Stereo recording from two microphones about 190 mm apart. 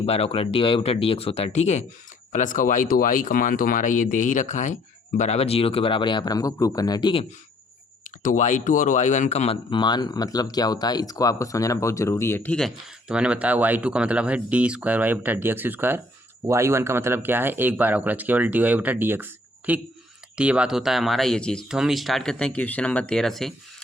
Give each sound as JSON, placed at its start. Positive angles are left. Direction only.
{"t": 0.0, "sound": "speech", "side_deg": 30}
{"t": 8.0, "sound": "speech", "side_deg": 45}